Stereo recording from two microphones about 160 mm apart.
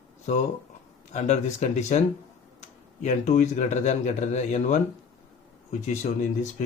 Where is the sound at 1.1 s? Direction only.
45° left (ahead or behind).